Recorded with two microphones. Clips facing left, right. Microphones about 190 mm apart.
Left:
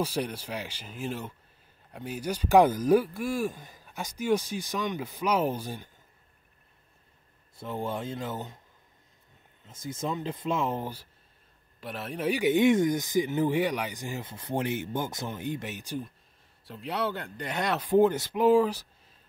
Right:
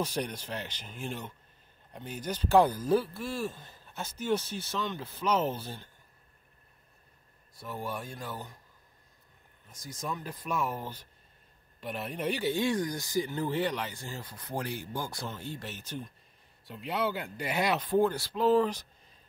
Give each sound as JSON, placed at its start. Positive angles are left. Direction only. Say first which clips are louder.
{"t": 0.0, "sound": "speech", "louder": "left 3 dB", "side_deg": 5}
{"t": 7.5, "sound": "speech", "louder": "left 4 dB", "side_deg": 25}
{"t": 9.7, "sound": "speech", "louder": "left 5 dB", "side_deg": 25}
{"t": 11.8, "sound": "speech", "louder": "left 2 dB", "side_deg": 0}
{"t": 12.4, "sound": "speech", "louder": "left 9 dB", "side_deg": 20}
{"t": 16.6, "sound": "speech", "louder": "left 1 dB", "side_deg": 0}
{"t": 17.8, "sound": "speech", "louder": "left 5 dB", "side_deg": 20}